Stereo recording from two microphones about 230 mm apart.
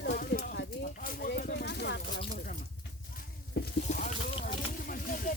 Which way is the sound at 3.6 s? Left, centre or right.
Left.